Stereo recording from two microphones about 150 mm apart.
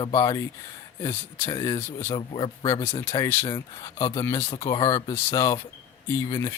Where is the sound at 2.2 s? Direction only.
30° left (ahead or behind).